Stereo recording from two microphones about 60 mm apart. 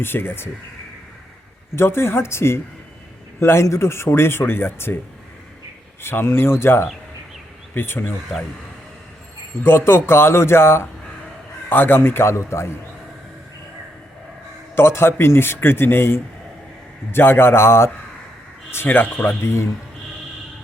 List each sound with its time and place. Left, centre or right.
0.0 s a man's voice: left
1.7 s speech: left
6.0 s a man's voice: left
9.6 s a man's voice: left
12.3 s speech: left
14.8 s a man's voice: left
18.9 s speech: left
19.4 s speech: left